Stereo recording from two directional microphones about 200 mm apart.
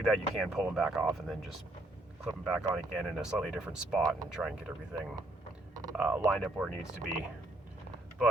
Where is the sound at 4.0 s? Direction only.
20° right (ahead or behind).